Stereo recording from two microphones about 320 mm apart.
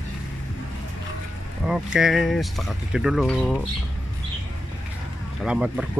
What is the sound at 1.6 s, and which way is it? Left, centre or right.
Speech, centre.